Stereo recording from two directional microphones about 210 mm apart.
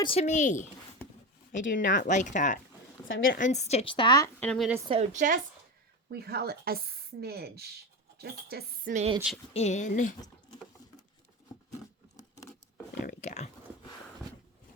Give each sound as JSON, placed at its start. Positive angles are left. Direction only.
{"t": 0.0, "sound": "a woman's voice", "side_deg": 30}
{"t": 4.4, "sound": "speech", "side_deg": 5}
{"t": 4.9, "sound": "speech", "side_deg": -35}
{"t": 6.1, "sound": "a woman's voice", "side_deg": -50}
{"t": 9.5, "sound": "a woman's voice", "side_deg": 30}
{"t": 13.0, "sound": "a sound", "side_deg": 35}